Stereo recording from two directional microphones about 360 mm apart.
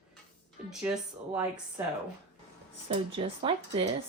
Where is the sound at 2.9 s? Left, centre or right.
Centre.